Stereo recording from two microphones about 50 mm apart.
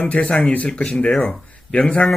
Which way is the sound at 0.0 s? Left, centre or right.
Left.